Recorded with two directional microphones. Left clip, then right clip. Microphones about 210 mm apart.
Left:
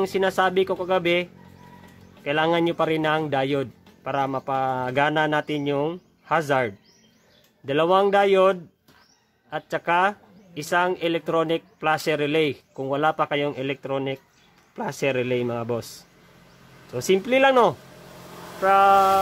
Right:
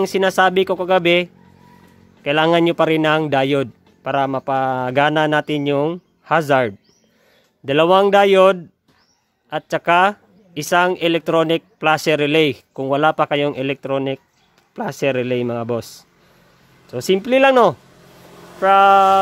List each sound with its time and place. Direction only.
0.0 s speech: 45° right (ahead or behind)